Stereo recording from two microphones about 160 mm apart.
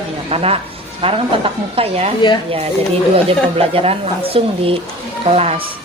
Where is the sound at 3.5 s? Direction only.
35° right (ahead or behind).